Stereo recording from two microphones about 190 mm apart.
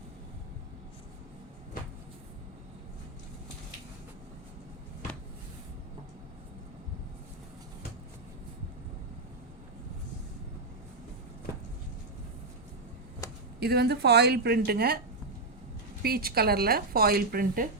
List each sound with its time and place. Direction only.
13.6 s a woman's voice: 60° right (ahead or behind)
16.0 s speech: 55° right (ahead or behind)